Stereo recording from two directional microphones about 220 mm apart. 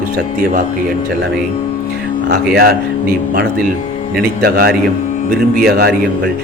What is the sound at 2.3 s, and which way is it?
Speech, 45° right (ahead or behind).